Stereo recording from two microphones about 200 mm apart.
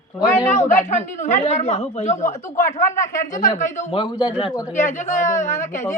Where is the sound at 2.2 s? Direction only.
15° left (ahead or behind).